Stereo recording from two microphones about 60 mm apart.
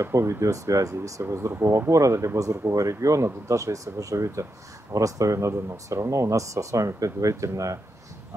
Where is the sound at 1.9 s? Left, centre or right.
Right.